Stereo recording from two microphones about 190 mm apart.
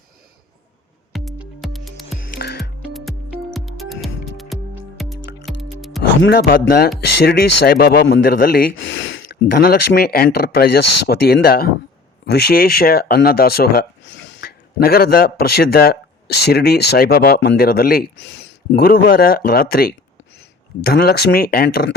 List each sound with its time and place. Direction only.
1.1 s music: centre (ahead or behind)
2.3 s music: 55° left (ahead or behind)
2.6 s music: centre (ahead or behind)
6.3 s speech: 55° left (ahead or behind); by 9.2 s 75° left (ahead or behind)
9.5 s speech: 55° left (ahead or behind)
20.9 s speech: 55° left (ahead or behind)